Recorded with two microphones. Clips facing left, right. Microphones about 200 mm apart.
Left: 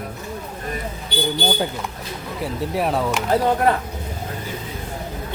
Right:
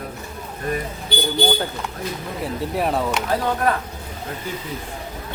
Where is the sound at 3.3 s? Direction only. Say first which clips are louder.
Left 4 dB; 25° left (ahead or behind).